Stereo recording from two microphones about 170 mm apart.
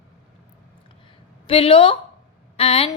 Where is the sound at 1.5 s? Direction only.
35° left (ahead or behind).